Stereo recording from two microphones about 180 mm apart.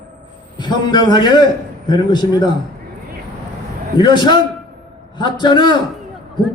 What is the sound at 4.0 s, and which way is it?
A man's voice, 25° left (ahead or behind).